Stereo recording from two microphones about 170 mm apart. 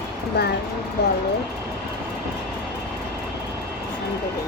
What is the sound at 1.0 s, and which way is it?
Speech, 75° left (ahead or behind).